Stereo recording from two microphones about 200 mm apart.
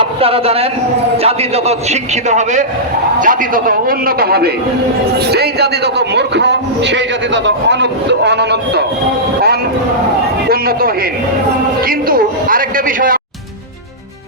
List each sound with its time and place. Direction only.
0.0 s a man's voice: 30° right (ahead or behind); by 8.8 s 60° right (ahead or behind)
10.5 s a man's voice: 50° right (ahead or behind)